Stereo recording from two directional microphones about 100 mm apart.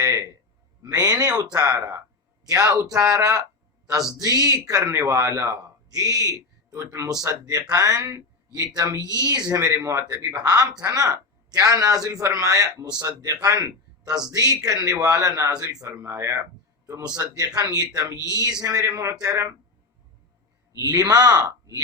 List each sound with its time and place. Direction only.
0.0 s a sound: 30° right (ahead or behind)
0.8 s a man's voice: 35° right (ahead or behind)
20.7 s speech: 35° right (ahead or behind)